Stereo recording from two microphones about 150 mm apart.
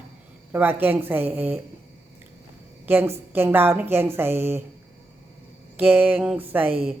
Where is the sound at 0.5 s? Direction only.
15° right (ahead or behind).